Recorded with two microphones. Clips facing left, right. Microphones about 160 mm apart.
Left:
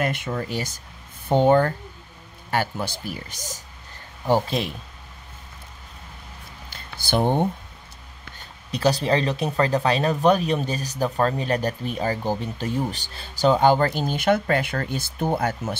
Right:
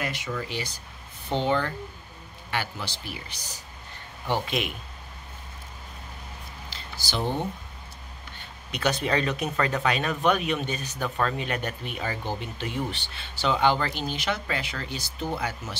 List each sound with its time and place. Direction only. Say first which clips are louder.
0.0 s speech: left 6 dB; 50° left (ahead or behind); by 4.7 s 35° left (ahead or behind)
6.7 s a sound: left 9 dB; 55° left (ahead or behind)
8.4 s speech: left 5 dB; 35° left (ahead or behind); by 15.8 s 50° left (ahead or behind)